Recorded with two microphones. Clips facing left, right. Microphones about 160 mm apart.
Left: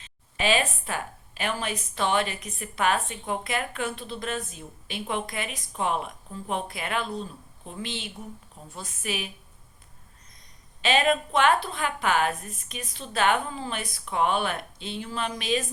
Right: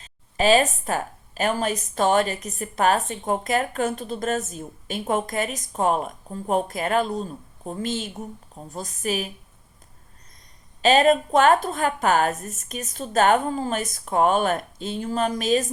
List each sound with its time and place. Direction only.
0.0 s a woman's voice: 40° right (ahead or behind)
10.8 s a woman's voice: 40° right (ahead or behind)